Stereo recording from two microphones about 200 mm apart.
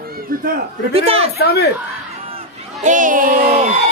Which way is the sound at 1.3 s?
55° left (ahead or behind).